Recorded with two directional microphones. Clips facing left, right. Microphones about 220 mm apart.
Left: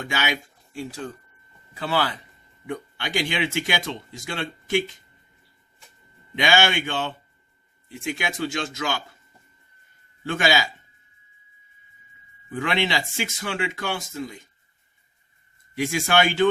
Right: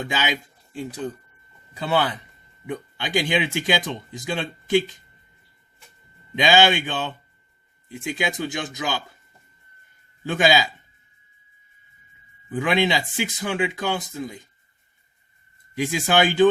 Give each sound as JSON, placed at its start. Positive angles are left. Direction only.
{"t": 0.0, "sound": "speech", "side_deg": -20}
{"t": 6.3, "sound": "speech", "side_deg": -20}
{"t": 10.2, "sound": "speech", "side_deg": -20}
{"t": 12.5, "sound": "speech", "side_deg": -15}
{"t": 15.7, "sound": "speech", "side_deg": -20}